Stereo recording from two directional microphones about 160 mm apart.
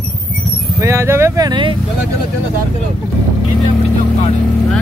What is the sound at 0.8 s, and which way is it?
Vehicle, 15° right (ahead or behind).